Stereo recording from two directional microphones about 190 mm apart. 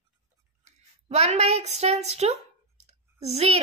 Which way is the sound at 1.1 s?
35° right (ahead or behind).